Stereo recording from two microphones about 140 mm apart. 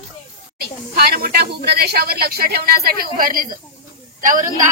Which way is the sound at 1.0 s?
90° right.